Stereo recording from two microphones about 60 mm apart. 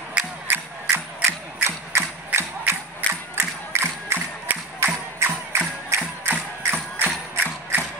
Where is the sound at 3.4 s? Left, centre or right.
Right.